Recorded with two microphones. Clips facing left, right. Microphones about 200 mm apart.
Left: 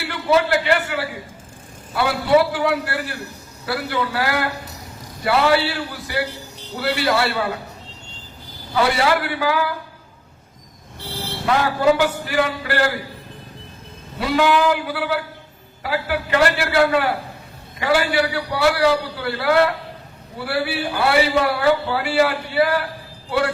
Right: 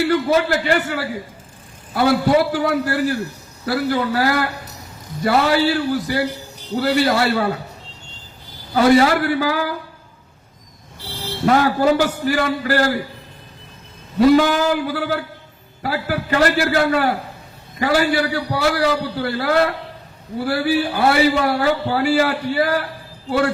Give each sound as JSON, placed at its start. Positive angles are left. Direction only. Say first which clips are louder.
{"t": 0.1, "sound": "a man's voice", "louder": "right 2 dB", "side_deg": -40}
{"t": 8.7, "sound": "a man's voice", "louder": "right 5 dB", "side_deg": -40}
{"t": 11.4, "sound": "a man's voice", "louder": "right 2 dB", "side_deg": -45}
{"t": 14.2, "sound": "a man's voice", "louder": "right 5 dB", "side_deg": -45}